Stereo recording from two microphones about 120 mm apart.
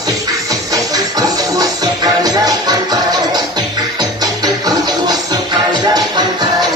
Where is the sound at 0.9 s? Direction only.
30° right (ahead or behind).